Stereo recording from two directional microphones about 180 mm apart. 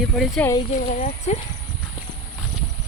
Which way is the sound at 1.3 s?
40° left (ahead or behind).